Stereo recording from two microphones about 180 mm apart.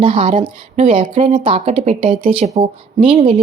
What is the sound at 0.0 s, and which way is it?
Speech, 30° right (ahead or behind).